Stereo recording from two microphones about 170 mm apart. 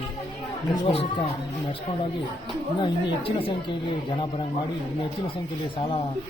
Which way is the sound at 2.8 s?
30° left (ahead or behind).